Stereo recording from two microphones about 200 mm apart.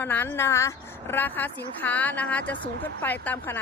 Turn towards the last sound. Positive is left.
turn(degrees=10)  # may be behind; listen again after turning